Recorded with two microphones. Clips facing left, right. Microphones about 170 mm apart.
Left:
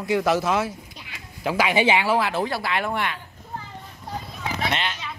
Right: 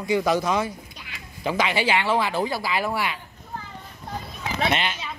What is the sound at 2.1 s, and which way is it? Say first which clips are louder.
Speech: left 1 dB; centre (ahead or behind).